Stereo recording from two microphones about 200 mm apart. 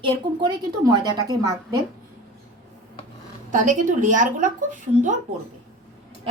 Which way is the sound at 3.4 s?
40° right (ahead or behind).